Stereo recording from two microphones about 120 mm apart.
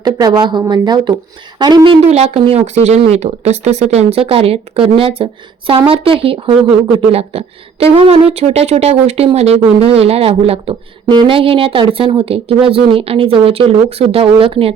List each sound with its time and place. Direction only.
0.0 s a woman's voice: 35° right (ahead or behind)